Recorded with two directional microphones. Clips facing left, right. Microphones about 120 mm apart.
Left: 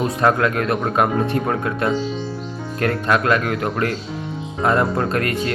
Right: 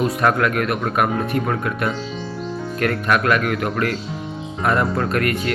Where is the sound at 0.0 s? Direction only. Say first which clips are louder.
Left 1 dB; 25° left (ahead or behind).